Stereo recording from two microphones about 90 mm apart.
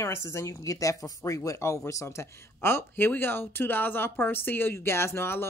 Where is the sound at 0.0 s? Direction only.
30° left (ahead or behind).